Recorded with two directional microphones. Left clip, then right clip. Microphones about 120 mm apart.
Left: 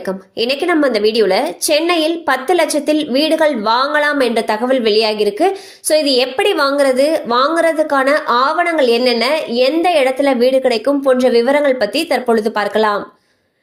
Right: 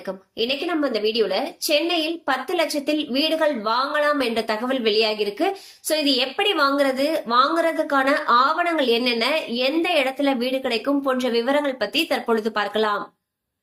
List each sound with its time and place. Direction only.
0.3 s a woman's voice: 90° left; by 13.0 s 60° left (ahead or behind)